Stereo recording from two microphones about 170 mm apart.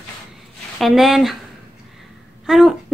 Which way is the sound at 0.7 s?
Centre (ahead or behind).